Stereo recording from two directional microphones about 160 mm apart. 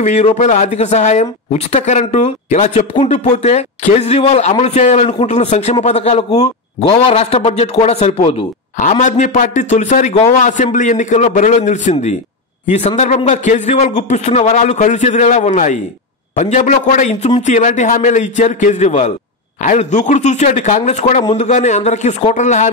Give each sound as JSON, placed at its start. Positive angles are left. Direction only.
{"t": 0.0, "sound": "speech", "side_deg": 45}